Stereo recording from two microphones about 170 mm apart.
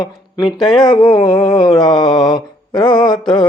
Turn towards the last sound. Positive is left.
turn(degrees=25)  # may be behind; listen again after turning